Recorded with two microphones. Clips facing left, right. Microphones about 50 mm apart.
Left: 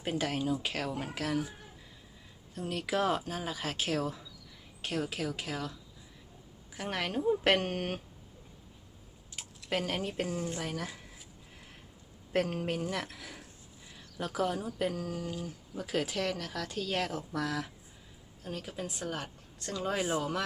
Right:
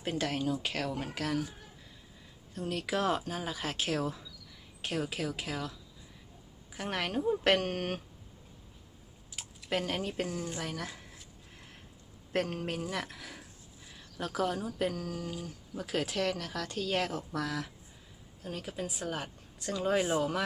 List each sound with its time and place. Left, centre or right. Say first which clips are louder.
0.0 s speech: even; centre
2.6 s speech: left 1 dB; centre
6.7 s speech: even; centre
9.3 s a sound: even; centre
12.3 s speech: left 2 dB; centre